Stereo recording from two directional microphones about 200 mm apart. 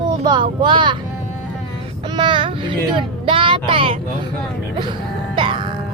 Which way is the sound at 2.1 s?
25° right (ahead or behind).